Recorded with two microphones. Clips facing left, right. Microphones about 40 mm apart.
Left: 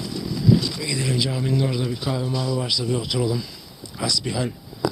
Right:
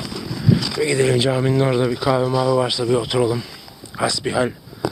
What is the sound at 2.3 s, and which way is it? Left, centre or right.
Speech, right.